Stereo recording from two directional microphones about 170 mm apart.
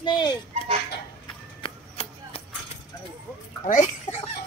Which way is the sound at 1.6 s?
35° left (ahead or behind).